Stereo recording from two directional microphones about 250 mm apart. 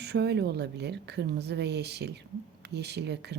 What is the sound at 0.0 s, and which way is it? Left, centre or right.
A woman's voice, right.